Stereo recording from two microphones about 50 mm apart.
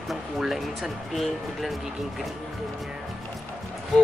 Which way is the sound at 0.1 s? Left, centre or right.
Centre.